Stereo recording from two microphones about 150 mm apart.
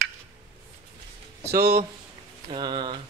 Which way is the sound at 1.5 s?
90° right.